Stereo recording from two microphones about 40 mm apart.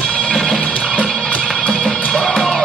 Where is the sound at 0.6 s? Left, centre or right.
Left.